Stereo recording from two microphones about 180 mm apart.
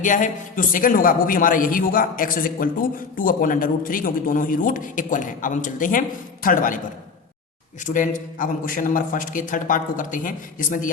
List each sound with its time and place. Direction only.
0.0 s a man's voice: 45° left (ahead or behind)
7.9 s a man's voice: 45° left (ahead or behind)